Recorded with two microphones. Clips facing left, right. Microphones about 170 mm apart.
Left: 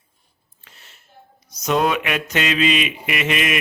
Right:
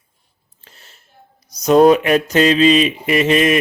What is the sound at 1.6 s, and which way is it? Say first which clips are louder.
Mantra: right 10 dB; 35° right (ahead or behind).